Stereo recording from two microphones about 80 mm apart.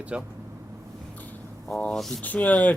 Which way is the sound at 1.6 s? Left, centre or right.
Centre.